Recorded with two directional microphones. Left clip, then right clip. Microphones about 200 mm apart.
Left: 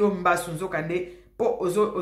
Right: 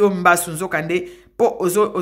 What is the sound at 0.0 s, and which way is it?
Speech, 30° right (ahead or behind).